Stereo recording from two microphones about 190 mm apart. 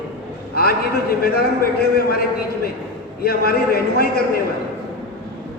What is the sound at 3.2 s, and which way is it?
A man's voice, 55° left (ahead or behind).